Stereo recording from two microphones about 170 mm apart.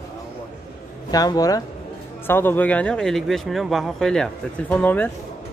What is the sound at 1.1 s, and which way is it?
Speech, 20° left (ahead or behind).